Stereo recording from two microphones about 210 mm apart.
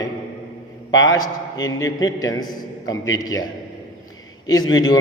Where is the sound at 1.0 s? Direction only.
15° left (ahead or behind).